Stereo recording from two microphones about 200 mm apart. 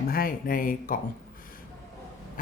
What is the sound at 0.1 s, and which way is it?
Speech, 45° left (ahead or behind).